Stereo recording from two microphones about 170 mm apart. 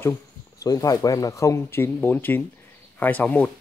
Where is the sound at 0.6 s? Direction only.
20° left (ahead or behind).